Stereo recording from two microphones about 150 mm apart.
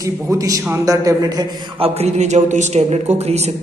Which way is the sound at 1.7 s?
45° right (ahead or behind).